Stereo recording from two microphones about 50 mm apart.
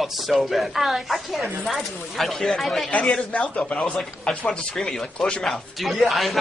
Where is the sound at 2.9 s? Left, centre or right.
Left.